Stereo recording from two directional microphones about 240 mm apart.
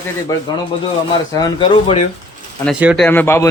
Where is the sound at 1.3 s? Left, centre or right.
Centre.